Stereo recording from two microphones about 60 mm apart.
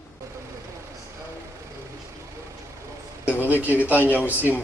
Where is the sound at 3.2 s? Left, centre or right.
Right.